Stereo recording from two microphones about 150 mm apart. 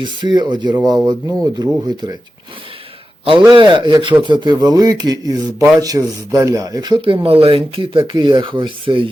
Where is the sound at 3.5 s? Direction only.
30° right (ahead or behind).